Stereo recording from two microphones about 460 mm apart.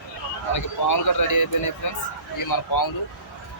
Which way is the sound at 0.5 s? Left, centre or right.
Left.